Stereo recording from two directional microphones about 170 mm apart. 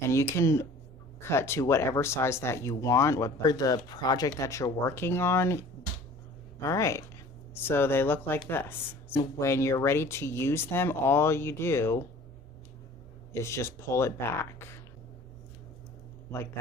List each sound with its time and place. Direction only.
0.0 s speech: 15° left (ahead or behind)
13.4 s speech: 15° left (ahead or behind)